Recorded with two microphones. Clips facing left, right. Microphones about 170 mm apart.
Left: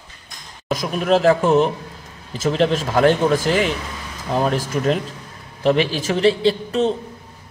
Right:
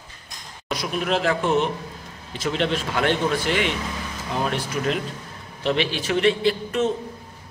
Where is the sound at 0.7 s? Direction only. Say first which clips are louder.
Left 6 dB; 45° left (ahead or behind).